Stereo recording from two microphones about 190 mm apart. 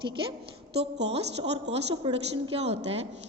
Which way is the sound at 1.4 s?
30° right (ahead or behind).